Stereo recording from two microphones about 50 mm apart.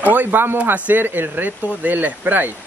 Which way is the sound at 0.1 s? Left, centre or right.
Right.